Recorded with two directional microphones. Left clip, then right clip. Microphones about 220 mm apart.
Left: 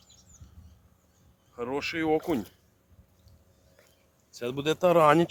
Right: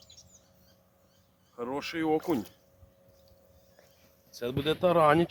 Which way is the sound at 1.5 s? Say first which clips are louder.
Left 3 dB; 35° left (ahead or behind).